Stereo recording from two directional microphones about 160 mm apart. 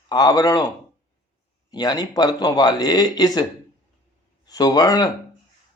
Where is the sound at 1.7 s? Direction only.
25° left (ahead or behind).